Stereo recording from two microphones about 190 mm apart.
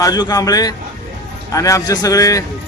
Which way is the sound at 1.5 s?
15° left (ahead or behind).